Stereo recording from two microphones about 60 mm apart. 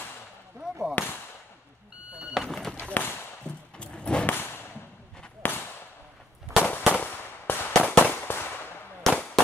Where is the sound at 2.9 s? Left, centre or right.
Left.